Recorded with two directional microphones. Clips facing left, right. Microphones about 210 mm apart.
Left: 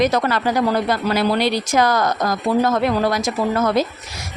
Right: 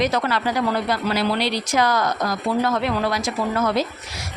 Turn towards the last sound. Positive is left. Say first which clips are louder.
# left 3 dB
turn(degrees=45)  # may be behind; listen again after turning